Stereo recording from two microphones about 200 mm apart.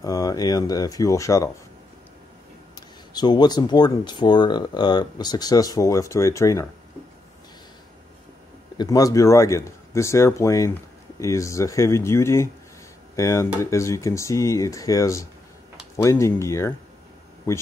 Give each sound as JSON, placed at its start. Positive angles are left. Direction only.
{"t": 0.0, "sound": "speech", "side_deg": 20}
{"t": 3.1, "sound": "speech", "side_deg": 20}
{"t": 8.7, "sound": "speech", "side_deg": 20}